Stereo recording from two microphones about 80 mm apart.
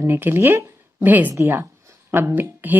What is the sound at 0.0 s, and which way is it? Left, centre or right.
Speech, right.